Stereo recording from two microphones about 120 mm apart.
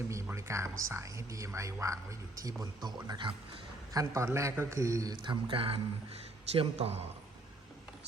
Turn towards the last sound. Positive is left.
turn(degrees=-55)  # may be behind; listen again after turning